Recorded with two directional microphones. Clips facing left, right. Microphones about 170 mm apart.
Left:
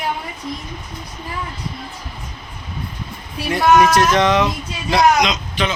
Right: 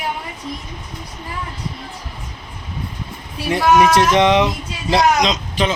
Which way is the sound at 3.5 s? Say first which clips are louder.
Even; 25° right (ahead or behind).